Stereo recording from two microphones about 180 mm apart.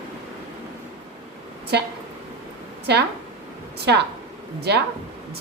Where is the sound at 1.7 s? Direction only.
70° right (ahead or behind).